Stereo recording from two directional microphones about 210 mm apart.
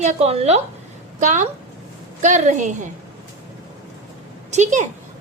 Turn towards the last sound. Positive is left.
turn(degrees=-35)  # may be behind; listen again after turning